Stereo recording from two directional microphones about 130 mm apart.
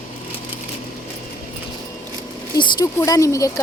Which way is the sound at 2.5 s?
30° left (ahead or behind).